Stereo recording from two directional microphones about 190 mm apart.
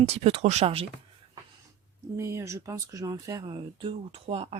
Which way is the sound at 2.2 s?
15° right (ahead or behind).